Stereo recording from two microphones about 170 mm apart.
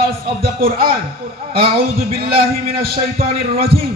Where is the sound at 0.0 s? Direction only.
60° right (ahead or behind).